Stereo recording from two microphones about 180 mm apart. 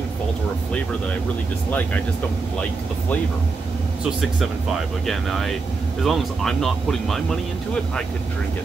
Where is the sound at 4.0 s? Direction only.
Centre (ahead or behind).